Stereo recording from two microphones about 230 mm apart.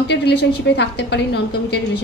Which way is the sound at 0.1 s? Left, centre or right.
Left.